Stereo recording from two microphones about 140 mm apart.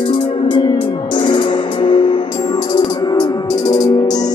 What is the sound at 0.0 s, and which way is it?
Music, 35° left (ahead or behind).